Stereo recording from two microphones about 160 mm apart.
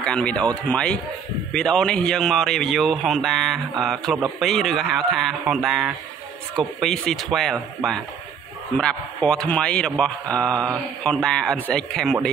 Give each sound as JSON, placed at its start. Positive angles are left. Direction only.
{"t": 0.0, "sound": "a man's voice", "side_deg": 5}